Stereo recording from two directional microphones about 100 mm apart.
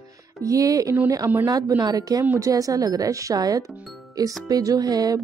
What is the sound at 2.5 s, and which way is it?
A woman's voice, 35° right (ahead or behind).